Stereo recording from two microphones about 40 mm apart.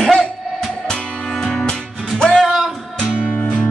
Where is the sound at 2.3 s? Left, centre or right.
Centre.